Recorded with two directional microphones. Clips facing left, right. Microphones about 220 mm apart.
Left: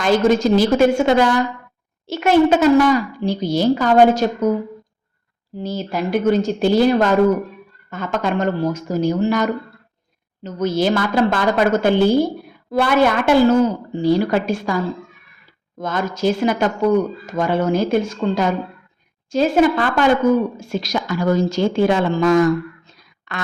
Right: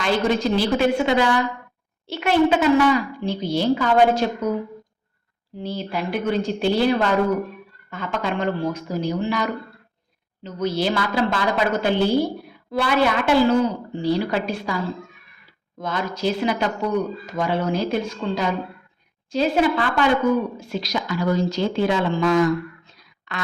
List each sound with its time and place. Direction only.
0.0 s speech: 45° left (ahead or behind)
5.5 s speech: 45° left (ahead or behind)
15.8 s speech: 45° left (ahead or behind)